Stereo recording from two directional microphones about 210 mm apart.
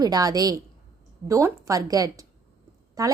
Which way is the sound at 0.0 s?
20° right (ahead or behind).